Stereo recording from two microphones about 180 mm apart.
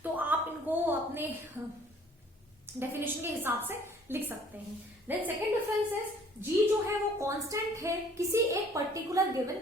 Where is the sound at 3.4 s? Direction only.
10° right (ahead or behind).